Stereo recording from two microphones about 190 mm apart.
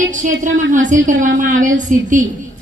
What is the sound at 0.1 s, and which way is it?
Speech, 40° right (ahead or behind).